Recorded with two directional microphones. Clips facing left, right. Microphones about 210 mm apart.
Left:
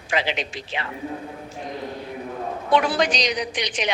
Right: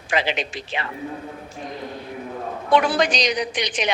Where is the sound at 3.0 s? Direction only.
50° right (ahead or behind).